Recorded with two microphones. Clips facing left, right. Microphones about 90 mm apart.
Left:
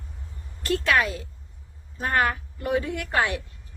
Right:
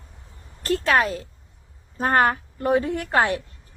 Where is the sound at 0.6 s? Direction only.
40° right (ahead or behind).